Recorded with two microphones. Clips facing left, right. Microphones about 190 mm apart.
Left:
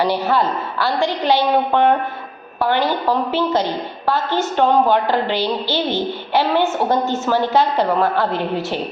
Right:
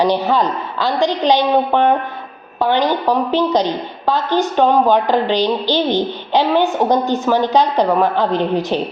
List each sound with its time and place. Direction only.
0.0 s a woman's voice: 15° right (ahead or behind)